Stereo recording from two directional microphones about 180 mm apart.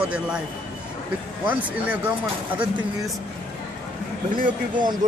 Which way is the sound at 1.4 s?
10° right (ahead or behind).